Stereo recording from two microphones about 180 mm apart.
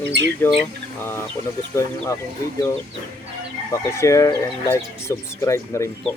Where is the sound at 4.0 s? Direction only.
15° left (ahead or behind).